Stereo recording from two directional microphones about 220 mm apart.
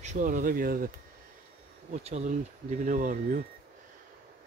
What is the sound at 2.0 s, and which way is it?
Speech, 30° right (ahead or behind).